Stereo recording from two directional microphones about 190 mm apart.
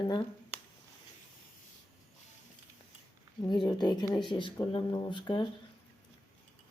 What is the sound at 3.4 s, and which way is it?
Speech, 20° left (ahead or behind).